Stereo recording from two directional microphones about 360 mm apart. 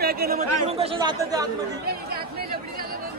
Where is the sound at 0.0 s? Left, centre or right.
Right; by 1.5 s centre.